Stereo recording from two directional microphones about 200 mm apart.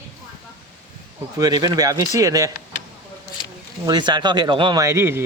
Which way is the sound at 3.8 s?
20° right (ahead or behind).